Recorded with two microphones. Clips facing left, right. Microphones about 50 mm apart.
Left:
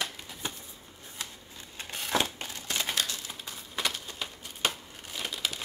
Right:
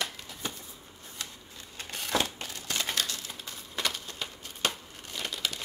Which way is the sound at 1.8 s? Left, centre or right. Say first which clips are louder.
Left 1 dB; left.